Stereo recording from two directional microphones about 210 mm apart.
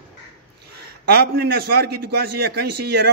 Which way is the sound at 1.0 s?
50° right (ahead or behind).